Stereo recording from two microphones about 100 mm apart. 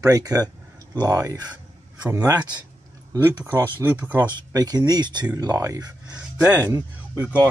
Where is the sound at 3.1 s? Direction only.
25° right (ahead or behind).